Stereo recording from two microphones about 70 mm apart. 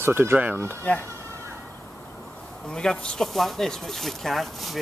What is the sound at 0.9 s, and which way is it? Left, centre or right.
Speech, centre.